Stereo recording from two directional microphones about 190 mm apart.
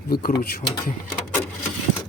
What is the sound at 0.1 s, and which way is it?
Speech, 50° left (ahead or behind).